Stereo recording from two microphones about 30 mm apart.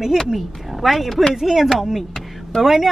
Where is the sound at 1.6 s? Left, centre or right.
Centre.